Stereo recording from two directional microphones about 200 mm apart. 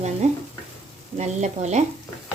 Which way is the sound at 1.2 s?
35° right (ahead or behind).